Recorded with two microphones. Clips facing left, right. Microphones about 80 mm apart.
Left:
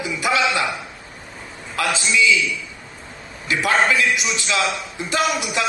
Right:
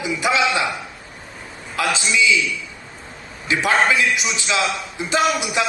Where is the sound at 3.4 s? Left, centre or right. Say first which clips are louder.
Right 1 dB; right.